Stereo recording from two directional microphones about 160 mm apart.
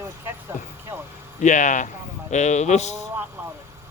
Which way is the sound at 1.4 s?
50° left (ahead or behind).